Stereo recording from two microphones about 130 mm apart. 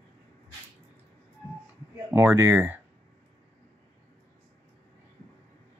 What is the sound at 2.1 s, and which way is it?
Speech, 15° right (ahead or behind).